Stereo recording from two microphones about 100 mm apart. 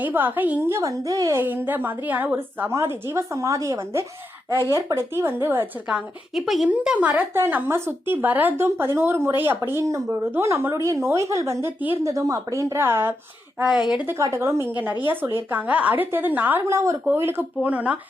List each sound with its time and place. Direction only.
0.0 s speech: 20° right (ahead or behind)
0.7 s a woman's voice: 30° right (ahead or behind)
1.4 s speech: 20° right (ahead or behind)
6.3 s speech: centre (ahead or behind)
6.7 s speech: 15° right (ahead or behind)
13.6 s speech: 10° right (ahead or behind)
14.1 s speech: 30° right (ahead or behind)
16.6 s speech: 30° right (ahead or behind); by 17.9 s 15° right (ahead or behind)